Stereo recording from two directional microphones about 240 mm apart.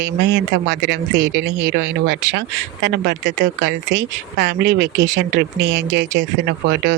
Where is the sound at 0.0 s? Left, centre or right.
Right.